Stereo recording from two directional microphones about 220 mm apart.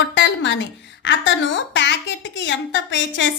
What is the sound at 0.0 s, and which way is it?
A woman's voice, 55° left (ahead or behind).